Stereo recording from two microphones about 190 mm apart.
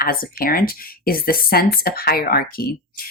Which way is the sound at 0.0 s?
50° left (ahead or behind).